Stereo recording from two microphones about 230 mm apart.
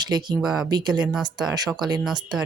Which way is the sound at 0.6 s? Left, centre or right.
Centre.